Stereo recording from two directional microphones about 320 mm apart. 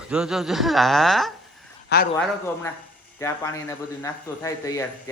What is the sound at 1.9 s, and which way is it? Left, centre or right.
Speech, left.